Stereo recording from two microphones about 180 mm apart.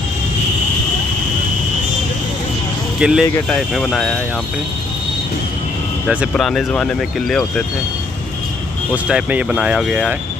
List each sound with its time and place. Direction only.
3.0 s speech: 5° right (ahead or behind)
6.0 s speech: centre (ahead or behind)
8.9 s speech: 5° right (ahead or behind)